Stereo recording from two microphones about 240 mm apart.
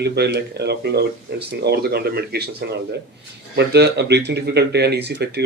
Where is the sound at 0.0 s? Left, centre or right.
Right.